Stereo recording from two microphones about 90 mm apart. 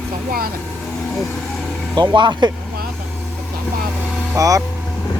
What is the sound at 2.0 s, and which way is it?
Speech, 55° right (ahead or behind).